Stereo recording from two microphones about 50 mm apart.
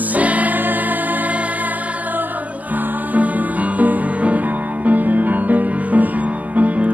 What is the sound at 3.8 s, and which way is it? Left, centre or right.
Music, right.